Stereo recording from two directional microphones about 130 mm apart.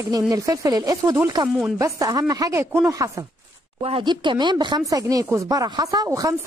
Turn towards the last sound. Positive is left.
turn(degrees=-25)  # may be behind; listen again after turning